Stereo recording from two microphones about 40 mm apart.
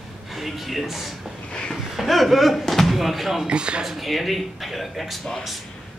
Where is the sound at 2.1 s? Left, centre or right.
Centre.